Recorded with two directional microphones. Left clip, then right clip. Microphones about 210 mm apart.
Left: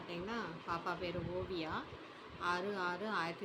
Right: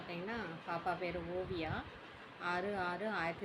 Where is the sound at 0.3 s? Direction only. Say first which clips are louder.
Left 1 dB; 20° left (ahead or behind).